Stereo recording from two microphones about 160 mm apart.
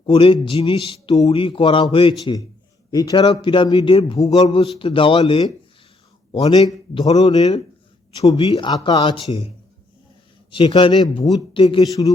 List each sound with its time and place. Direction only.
0.0 s speech: 35° left (ahead or behind)
7.1 s speech: 40° left (ahead or behind)
8.7 s speech: 25° left (ahead or behind)
10.5 s a man's voice: 30° left (ahead or behind)